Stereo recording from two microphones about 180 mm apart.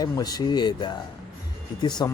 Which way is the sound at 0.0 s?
20° left (ahead or behind).